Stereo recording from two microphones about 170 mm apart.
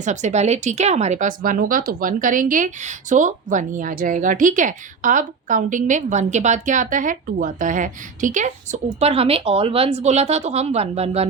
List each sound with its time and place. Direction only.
0.0 s speech: 45° right (ahead or behind)